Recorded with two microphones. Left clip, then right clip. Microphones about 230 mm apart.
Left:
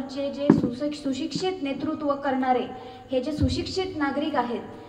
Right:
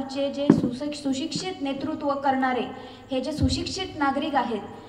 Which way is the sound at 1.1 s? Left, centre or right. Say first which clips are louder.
Left 1 dB; right.